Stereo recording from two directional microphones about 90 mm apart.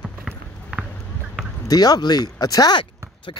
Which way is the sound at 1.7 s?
45° left (ahead or behind).